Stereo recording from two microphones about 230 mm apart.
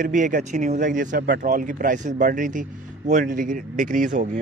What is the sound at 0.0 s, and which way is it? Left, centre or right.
Speech, right.